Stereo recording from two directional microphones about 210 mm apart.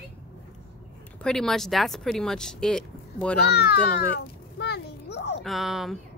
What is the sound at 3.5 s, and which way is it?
Speech, 50° left (ahead or behind).